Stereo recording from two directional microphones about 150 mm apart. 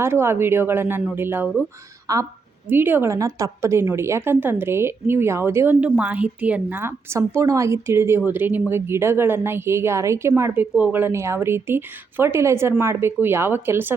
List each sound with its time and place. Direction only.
0.0 s a woman's voice: 15° right (ahead or behind)